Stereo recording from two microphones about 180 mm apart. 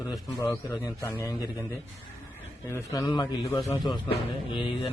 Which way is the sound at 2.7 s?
15° left (ahead or behind).